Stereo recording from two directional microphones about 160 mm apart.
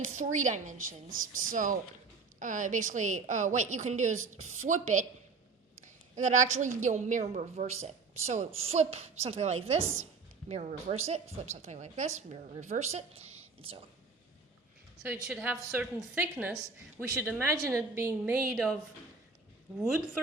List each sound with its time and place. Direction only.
0.2 s speech: 50° right (ahead or behind)
6.1 s speech: 50° right (ahead or behind)
15.0 s a woman's voice: 10° right (ahead or behind)